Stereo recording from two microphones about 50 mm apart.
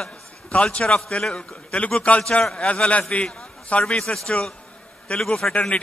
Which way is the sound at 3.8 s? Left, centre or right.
Centre.